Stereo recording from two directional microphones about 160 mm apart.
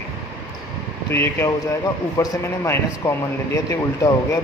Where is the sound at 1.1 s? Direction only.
15° left (ahead or behind).